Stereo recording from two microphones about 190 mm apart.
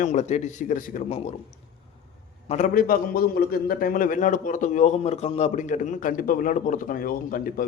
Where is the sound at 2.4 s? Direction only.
40° left (ahead or behind).